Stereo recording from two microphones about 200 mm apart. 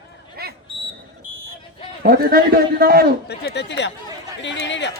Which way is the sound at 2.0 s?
45° right (ahead or behind).